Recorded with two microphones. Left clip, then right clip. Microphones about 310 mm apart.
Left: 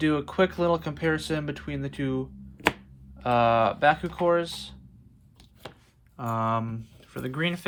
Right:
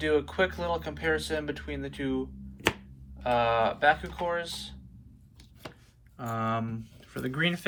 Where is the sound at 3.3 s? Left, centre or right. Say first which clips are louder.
Left 4 dB; centre.